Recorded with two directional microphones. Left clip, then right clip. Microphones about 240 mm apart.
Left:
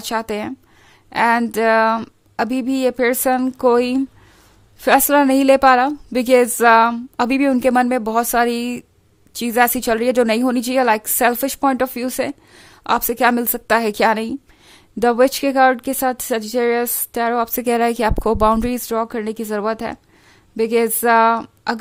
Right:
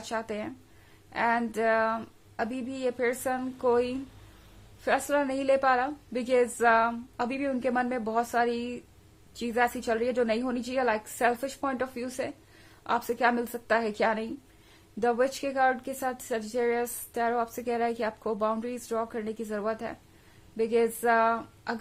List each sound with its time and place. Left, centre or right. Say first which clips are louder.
0.0 s speech: left 11 dB; left